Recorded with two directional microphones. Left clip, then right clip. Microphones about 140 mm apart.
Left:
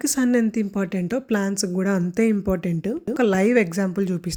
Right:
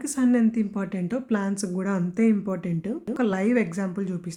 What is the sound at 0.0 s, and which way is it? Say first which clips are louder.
Speech: left 2 dB; 40° left (ahead or behind).